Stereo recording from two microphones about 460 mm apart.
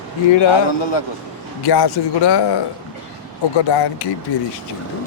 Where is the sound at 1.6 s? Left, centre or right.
Left.